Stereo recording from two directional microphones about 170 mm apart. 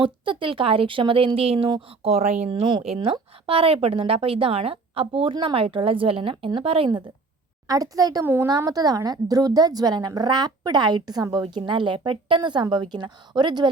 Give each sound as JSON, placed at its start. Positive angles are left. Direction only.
{"t": 0.0, "sound": "speech", "side_deg": -30}